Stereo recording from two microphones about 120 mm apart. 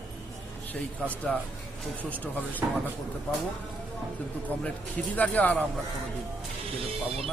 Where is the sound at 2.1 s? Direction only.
15° left (ahead or behind).